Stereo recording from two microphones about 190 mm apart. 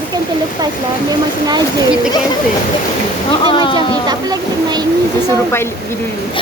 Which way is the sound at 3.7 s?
20° right (ahead or behind).